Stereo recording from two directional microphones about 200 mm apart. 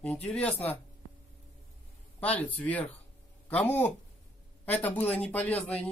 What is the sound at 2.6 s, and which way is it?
Speech, 5° left (ahead or behind).